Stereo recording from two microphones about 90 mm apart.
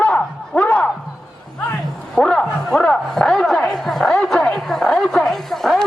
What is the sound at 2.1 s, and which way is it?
Speech, 5° left (ahead or behind).